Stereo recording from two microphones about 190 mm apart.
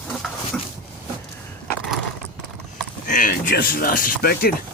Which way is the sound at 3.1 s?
45° left (ahead or behind).